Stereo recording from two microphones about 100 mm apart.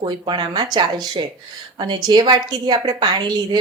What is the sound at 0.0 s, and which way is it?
A woman's voice, 50° right (ahead or behind).